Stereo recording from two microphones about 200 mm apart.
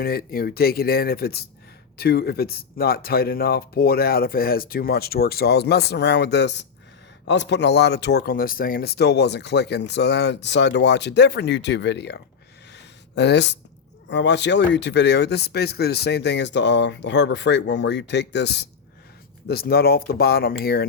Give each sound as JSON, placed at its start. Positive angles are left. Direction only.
{"t": 0.0, "sound": "speech", "side_deg": 50}
{"t": 12.7, "sound": "a sound", "side_deg": 60}
{"t": 14.1, "sound": "speech", "side_deg": 60}